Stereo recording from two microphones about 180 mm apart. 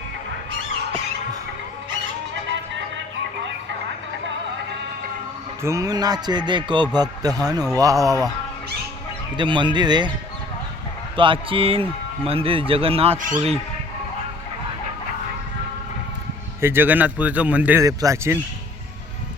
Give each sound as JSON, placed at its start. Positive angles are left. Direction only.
{"t": 2.3, "sound": "music", "side_deg": -80}
{"t": 5.6, "sound": "music", "side_deg": -20}
{"t": 9.4, "sound": "music", "side_deg": -25}
{"t": 11.2, "sound": "a man's voice", "side_deg": -30}
{"t": 13.1, "sound": "speech", "side_deg": -45}
{"t": 16.6, "sound": "a man's voice", "side_deg": -10}